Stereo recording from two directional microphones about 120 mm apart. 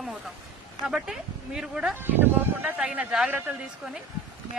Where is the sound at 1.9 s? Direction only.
15° right (ahead or behind).